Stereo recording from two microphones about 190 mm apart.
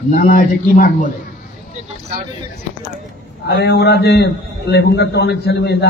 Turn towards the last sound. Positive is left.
turn(degrees=60)  # may be behind; listen again after turning